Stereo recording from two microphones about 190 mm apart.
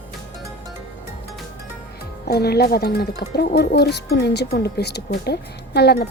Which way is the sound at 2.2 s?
55° left (ahead or behind).